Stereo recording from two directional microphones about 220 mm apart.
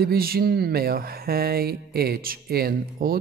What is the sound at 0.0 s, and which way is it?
Speech, 45° right (ahead or behind).